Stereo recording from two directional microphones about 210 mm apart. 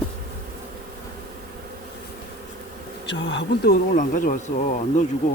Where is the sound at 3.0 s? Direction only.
60° left (ahead or behind).